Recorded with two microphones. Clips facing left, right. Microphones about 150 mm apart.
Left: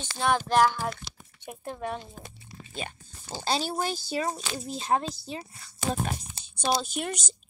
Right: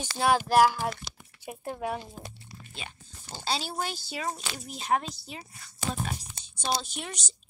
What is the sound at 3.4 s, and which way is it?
Speech, 45° left (ahead or behind).